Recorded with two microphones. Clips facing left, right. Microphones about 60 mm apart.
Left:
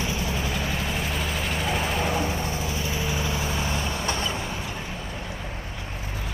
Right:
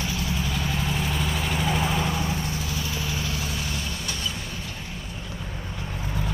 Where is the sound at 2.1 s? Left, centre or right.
Left.